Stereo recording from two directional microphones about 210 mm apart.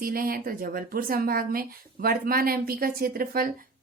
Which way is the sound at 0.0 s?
45° right (ahead or behind).